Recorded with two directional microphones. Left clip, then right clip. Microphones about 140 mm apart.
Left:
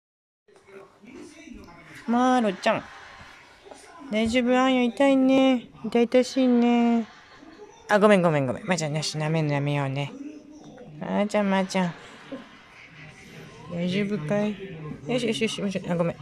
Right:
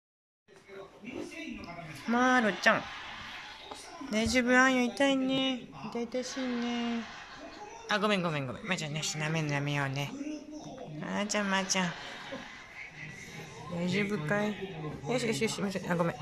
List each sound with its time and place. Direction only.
2.0 s speech: 25° left (ahead or behind)
4.1 s speech: 20° left (ahead or behind); by 5.6 s 45° left (ahead or behind)
5.9 s speech: 90° left; by 11.6 s 30° left (ahead or behind)
13.7 s speech: 15° left (ahead or behind)